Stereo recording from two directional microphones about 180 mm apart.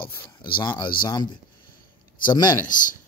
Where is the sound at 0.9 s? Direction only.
25° left (ahead or behind).